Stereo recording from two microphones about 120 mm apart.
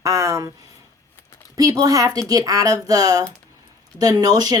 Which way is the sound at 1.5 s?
30° right (ahead or behind).